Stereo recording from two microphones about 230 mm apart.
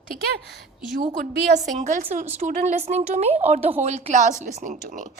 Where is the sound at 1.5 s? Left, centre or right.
Right.